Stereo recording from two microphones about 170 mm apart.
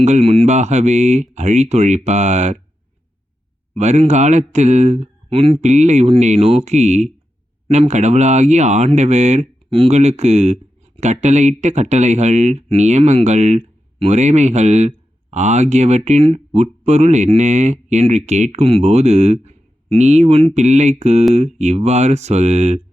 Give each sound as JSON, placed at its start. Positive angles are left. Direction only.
{"t": 0.0, "sound": "speech", "side_deg": -40}
{"t": 3.8, "sound": "speech", "side_deg": -40}